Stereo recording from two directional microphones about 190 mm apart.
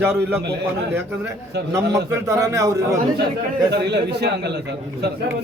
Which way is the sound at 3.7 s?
65° right (ahead or behind).